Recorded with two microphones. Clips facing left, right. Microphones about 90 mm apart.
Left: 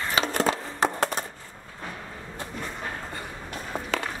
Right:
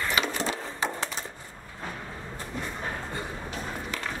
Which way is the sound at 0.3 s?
60° left (ahead or behind).